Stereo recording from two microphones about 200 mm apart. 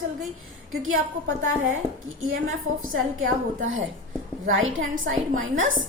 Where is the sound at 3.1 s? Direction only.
75° right (ahead or behind).